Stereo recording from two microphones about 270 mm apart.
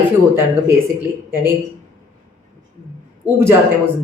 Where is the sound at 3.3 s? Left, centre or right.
Centre.